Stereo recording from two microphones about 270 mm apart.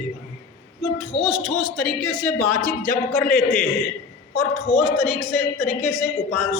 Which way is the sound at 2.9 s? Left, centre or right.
Left.